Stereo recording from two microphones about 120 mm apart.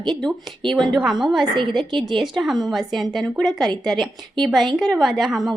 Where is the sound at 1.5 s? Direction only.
40° right (ahead or behind).